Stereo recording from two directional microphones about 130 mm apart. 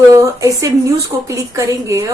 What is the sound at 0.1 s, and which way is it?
Speech, 25° right (ahead or behind).